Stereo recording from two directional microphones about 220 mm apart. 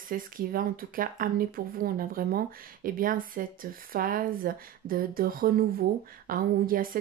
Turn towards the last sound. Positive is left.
turn(degrees=-40)  # may be behind; listen again after turning